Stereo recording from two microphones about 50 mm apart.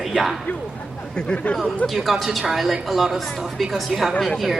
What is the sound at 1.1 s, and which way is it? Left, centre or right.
Speech, left.